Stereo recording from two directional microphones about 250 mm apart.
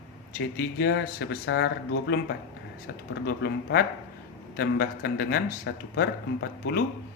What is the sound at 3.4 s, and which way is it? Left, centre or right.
A man's voice, left.